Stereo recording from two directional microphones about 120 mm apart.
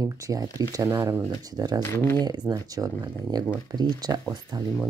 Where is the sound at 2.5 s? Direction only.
30° right (ahead or behind).